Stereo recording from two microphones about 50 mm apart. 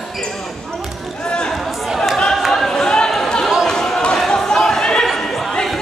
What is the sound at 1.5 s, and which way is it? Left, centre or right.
Chatter, centre.